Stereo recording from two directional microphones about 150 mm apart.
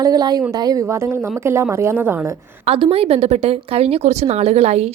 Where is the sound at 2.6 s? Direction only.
40° right (ahead or behind).